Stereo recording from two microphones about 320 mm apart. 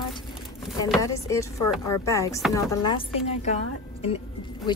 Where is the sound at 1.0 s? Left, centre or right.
Centre.